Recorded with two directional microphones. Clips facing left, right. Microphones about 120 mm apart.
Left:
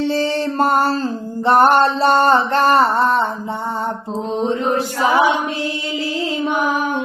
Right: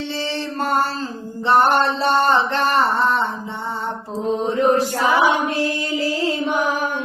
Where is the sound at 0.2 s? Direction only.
45° left (ahead or behind).